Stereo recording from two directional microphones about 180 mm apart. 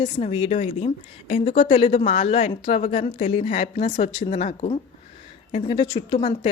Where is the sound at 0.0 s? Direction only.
30° left (ahead or behind).